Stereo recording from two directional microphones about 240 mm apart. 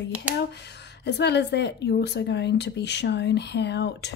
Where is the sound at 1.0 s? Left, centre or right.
Left.